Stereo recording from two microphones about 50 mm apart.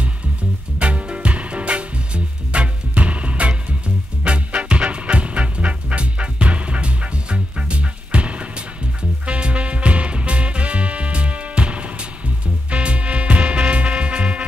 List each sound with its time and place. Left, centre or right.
0.7 s music: right